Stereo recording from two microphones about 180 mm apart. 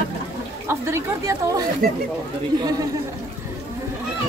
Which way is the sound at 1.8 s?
55° right (ahead or behind).